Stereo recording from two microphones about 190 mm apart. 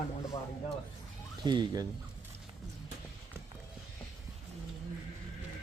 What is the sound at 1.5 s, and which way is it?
Speech, 20° right (ahead or behind).